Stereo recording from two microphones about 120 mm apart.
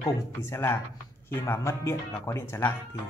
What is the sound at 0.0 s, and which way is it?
Speech, 20° left (ahead or behind).